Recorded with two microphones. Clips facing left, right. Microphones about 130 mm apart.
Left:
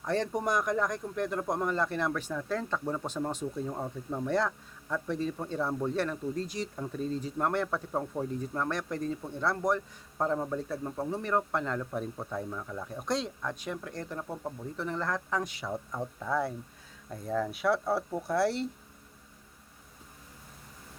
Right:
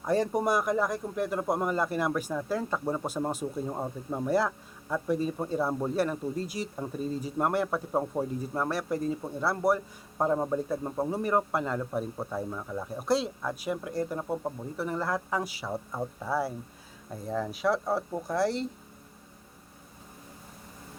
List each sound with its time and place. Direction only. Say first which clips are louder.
0.0 s speech: right 4 dB; 10° right (ahead or behind)